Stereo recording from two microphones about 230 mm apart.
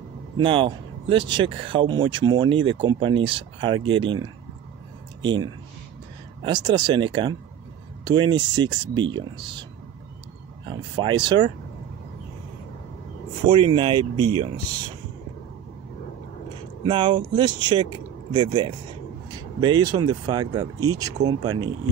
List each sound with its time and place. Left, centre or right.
0.4 s speech: right
10.7 s speech: right
13.5 s speech: right
16.8 s speech: right